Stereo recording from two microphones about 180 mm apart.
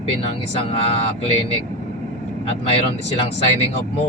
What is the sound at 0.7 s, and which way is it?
Speech, 30° left (ahead or behind).